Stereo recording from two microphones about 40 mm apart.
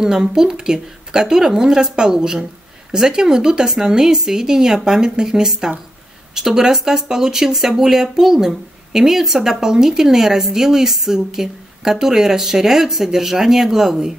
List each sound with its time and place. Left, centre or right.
0.0 s speech: centre